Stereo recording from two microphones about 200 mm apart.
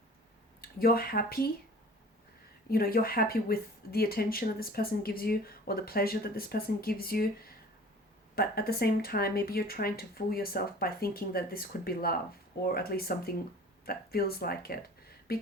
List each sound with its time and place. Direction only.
0.6 s speech: 50° left (ahead or behind)
2.6 s speech: 50° left (ahead or behind)
15.3 s a sound: 50° left (ahead or behind)